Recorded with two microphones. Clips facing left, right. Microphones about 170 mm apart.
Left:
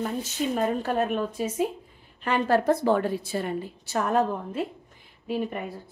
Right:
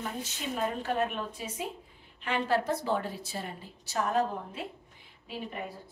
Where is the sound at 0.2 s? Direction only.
45° left (ahead or behind).